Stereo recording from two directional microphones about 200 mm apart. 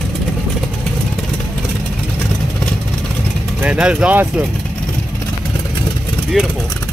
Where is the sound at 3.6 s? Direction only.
5° right (ahead or behind).